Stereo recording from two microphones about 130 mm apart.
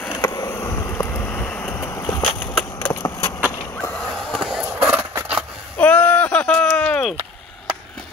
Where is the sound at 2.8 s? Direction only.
20° left (ahead or behind).